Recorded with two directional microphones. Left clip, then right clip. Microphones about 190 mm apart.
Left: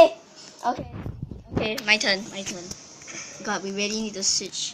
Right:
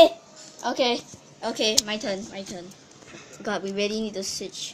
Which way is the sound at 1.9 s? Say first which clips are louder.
Left 8 dB; 10° right (ahead or behind).